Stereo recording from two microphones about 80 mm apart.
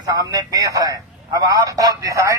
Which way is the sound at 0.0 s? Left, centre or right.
Right.